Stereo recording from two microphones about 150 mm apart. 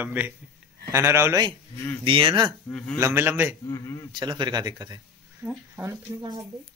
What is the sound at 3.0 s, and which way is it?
Speech, 15° right (ahead or behind).